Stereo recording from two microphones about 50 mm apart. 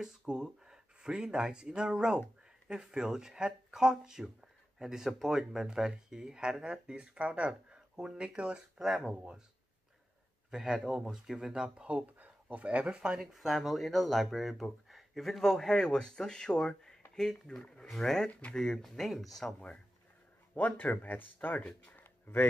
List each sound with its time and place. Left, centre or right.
0.3 s speech: centre
7.9 s speech: centre
8.2 s speech: right
10.5 s speech: centre
13.2 s speech: centre
18.2 s speech: centre
20.5 s speech: left
21.9 s a sound: left